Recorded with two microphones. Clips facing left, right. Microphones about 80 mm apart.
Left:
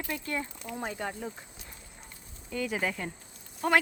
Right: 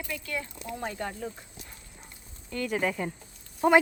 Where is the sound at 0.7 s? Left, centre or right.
Centre.